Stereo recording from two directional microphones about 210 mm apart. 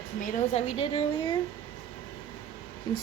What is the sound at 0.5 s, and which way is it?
Speech, 25° left (ahead or behind).